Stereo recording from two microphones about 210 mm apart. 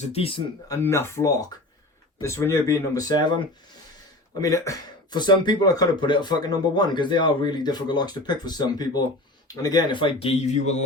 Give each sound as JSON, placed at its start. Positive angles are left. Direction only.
{"t": 0.1, "sound": "speech", "side_deg": 25}
{"t": 0.7, "sound": "speech", "side_deg": 15}
{"t": 4.4, "sound": "speech", "side_deg": 15}